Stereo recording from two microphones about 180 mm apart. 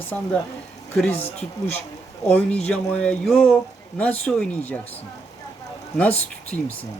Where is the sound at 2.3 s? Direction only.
5° left (ahead or behind).